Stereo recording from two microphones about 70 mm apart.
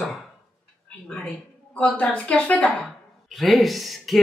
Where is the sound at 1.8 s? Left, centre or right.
Centre.